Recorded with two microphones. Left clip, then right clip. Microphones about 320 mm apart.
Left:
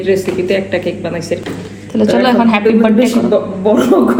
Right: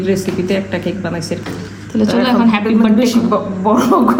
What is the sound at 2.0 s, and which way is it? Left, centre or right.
Speech, centre.